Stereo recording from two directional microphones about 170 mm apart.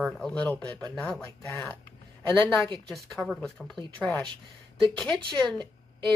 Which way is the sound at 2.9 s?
Centre (ahead or behind).